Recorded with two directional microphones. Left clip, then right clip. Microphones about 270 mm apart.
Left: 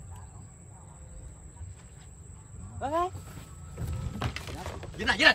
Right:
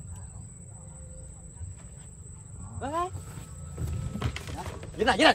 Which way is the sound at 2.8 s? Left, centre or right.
Left.